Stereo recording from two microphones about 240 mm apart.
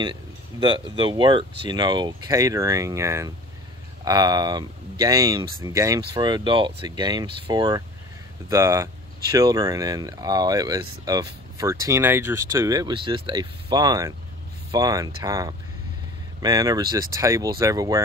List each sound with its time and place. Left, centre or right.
0.0 s speech: centre